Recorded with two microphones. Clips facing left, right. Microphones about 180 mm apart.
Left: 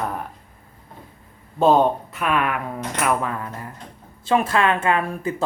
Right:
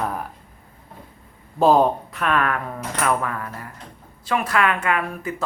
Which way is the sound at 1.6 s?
Centre (ahead or behind).